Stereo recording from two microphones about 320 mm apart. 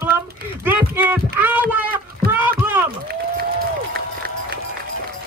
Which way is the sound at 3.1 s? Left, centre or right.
Right.